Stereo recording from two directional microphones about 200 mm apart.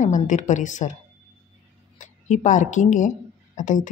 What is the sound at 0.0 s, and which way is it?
Speech, 40° left (ahead or behind).